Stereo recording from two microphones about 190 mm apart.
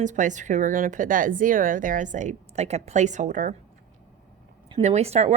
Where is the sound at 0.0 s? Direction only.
40° right (ahead or behind).